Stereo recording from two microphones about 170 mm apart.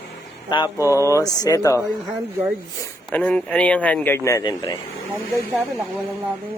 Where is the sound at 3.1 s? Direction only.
5° left (ahead or behind); by 4.8 s 25° left (ahead or behind).